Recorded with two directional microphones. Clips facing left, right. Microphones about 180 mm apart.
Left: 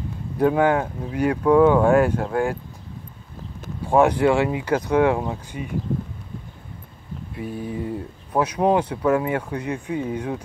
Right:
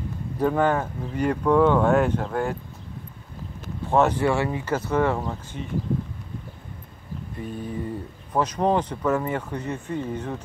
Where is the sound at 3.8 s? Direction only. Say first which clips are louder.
Left 4 dB; 10° left (ahead or behind).